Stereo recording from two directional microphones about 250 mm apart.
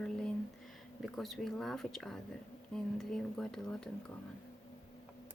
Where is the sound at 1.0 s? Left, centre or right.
Centre.